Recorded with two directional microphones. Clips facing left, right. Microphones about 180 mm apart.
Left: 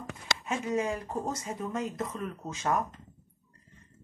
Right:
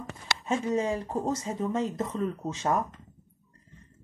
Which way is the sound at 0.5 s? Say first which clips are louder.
Right 3 dB; 30° right (ahead or behind).